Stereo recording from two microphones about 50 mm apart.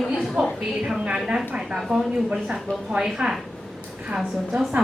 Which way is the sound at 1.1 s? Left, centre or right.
Centre.